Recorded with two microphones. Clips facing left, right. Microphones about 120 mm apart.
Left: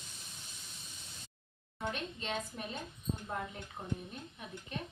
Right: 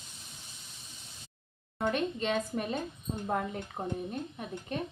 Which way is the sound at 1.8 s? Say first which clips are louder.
Right 9 dB; 60° right (ahead or behind).